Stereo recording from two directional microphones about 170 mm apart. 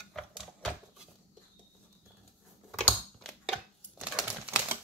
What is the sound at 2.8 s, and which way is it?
Crumpling, centre (ahead or behind).